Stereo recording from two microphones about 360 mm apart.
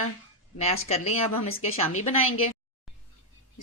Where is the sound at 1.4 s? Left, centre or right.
Left.